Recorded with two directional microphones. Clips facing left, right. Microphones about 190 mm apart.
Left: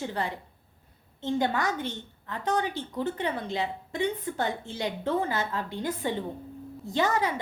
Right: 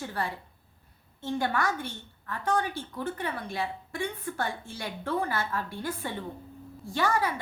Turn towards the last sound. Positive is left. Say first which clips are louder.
# left 1 dB
turn(degrees=20)  # may be behind; listen again after turning